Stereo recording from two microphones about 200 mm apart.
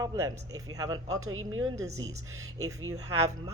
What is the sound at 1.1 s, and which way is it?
Speech, 90° right.